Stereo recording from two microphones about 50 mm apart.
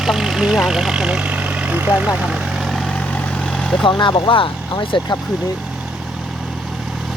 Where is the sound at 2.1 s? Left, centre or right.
Centre.